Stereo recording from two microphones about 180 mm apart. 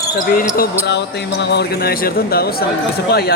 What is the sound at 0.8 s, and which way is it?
Speech, 70° left (ahead or behind).